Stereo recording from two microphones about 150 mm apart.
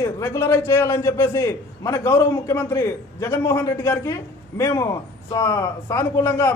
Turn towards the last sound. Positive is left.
turn(degrees=15)  # may be behind; listen again after turning